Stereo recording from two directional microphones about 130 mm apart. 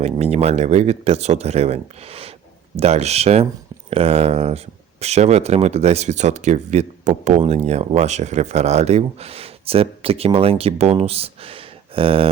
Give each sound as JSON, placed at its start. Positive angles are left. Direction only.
{"t": 0.0, "sound": "speech", "side_deg": -55}